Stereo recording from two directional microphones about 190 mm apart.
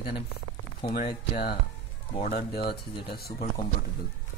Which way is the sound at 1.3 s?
55° left (ahead or behind).